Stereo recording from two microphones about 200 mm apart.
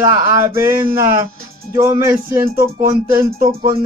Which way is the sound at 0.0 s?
15° right (ahead or behind).